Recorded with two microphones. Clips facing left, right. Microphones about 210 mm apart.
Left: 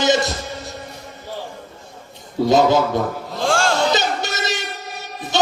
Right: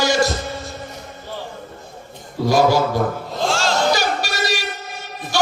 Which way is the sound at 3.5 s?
55° left (ahead or behind).